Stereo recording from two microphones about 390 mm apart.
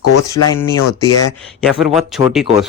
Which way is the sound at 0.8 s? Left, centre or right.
Left.